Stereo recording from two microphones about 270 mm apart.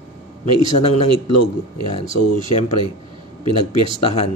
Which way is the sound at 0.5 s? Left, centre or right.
Left.